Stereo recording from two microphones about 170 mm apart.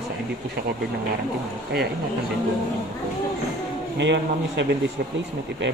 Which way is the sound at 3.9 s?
90° right.